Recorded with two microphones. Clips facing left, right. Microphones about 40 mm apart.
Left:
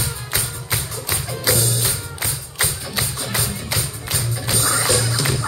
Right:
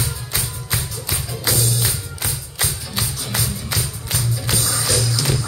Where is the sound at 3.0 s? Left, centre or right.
Left.